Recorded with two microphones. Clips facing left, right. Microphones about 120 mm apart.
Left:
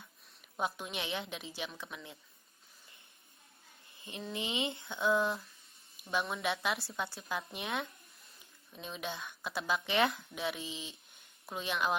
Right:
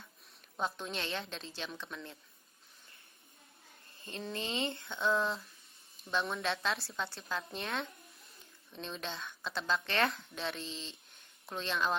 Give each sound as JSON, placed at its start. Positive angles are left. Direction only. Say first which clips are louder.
{"t": 0.5, "sound": "speech", "louder": "even", "side_deg": 10}
{"t": 3.9, "sound": "a sound", "louder": "right 1 dB", "side_deg": 15}
{"t": 4.4, "sound": "speech", "louder": "left 1 dB", "side_deg": 15}
{"t": 4.9, "sound": "speech", "louder": "left 2 dB", "side_deg": 0}